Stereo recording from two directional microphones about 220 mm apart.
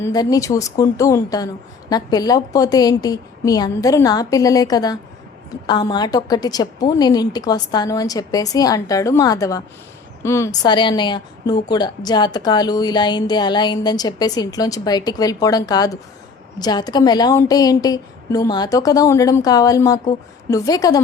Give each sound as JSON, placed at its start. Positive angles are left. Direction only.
{"t": 0.0, "sound": "a woman's voice", "side_deg": 15}